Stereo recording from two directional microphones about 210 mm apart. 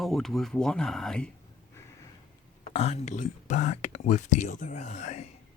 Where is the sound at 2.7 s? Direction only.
30° left (ahead or behind).